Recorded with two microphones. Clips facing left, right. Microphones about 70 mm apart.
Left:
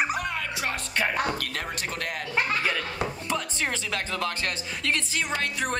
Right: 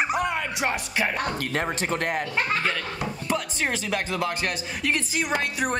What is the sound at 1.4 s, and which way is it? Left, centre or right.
Speech, right.